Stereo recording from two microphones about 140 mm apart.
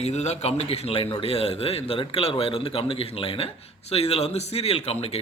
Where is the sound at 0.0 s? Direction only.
50° left (ahead or behind).